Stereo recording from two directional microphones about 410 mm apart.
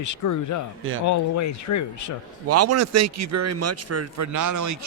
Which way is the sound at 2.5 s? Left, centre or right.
Right.